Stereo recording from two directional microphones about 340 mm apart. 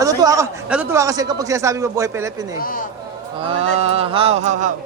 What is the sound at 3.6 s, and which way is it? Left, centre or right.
Speech, centre.